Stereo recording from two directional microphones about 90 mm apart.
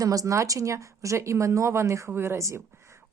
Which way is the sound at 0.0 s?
45° right (ahead or behind).